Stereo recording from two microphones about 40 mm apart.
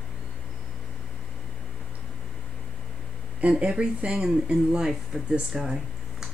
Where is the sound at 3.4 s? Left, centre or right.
Right.